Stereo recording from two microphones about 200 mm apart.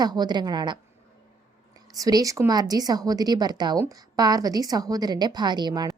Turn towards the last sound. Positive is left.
turn(degrees=-20)  # may be behind; listen again after turning